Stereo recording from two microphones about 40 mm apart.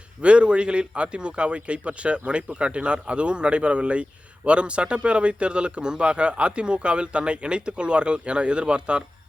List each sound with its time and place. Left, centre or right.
0.2 s speech: right